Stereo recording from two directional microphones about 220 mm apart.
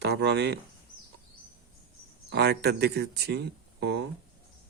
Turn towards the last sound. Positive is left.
turn(degrees=-50)  # may be behind; listen again after turning